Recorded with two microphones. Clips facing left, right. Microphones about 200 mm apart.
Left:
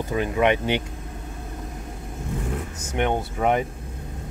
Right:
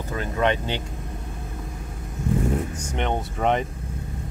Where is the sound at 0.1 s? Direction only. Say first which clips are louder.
Left 2 dB; 15° left (ahead or behind).